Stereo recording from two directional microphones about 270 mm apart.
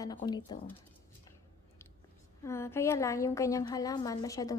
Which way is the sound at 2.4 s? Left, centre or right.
Centre.